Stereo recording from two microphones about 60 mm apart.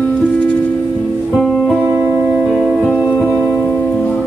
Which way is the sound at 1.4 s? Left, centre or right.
Centre.